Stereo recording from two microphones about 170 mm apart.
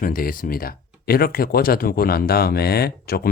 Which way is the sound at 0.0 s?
55° left (ahead or behind).